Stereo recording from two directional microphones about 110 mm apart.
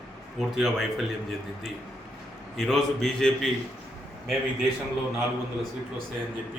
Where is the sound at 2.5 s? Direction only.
Centre (ahead or behind).